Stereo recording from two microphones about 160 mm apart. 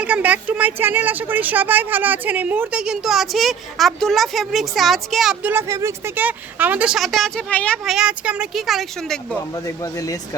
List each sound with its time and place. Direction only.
0.0 s speech: 10° right (ahead or behind)
9.8 s speech: 20° left (ahead or behind)